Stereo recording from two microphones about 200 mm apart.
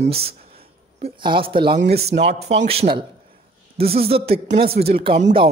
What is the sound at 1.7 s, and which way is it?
Speech, 55° right (ahead or behind).